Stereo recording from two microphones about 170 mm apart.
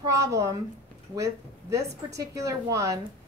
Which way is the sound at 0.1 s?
20° right (ahead or behind).